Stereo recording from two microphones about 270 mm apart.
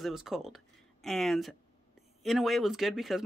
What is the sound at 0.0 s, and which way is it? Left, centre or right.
Speech, centre.